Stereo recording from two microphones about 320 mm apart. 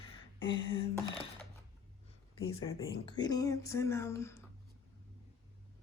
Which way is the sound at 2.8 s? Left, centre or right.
Centre.